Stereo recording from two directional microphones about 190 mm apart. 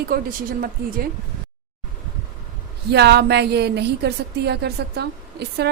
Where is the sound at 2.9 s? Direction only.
60° right (ahead or behind).